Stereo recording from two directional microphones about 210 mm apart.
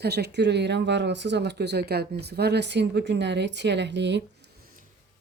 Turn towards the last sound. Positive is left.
turn(degrees=-55)  # may be behind; listen again after turning